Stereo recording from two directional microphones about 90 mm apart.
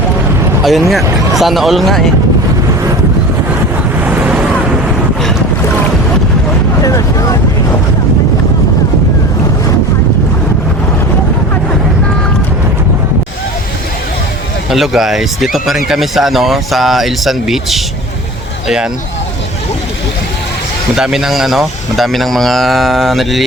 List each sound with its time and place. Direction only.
0.6 s speech: centre (ahead or behind)
4.0 s waves: 15° right (ahead or behind)
6.8 s vehicle: 40° left (ahead or behind)
14.7 s speech: 5° right (ahead or behind)
20.9 s speech: 5° right (ahead or behind)